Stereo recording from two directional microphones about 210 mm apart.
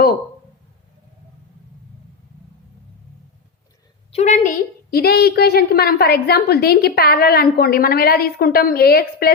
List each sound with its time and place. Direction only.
4.1 s a woman's voice: 35° left (ahead or behind)